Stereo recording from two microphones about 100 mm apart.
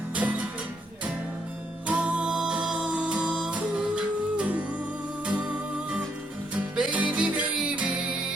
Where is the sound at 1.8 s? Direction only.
10° right (ahead or behind).